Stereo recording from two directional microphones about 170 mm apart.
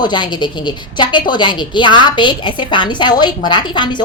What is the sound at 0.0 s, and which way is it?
A woman's voice, 25° left (ahead or behind).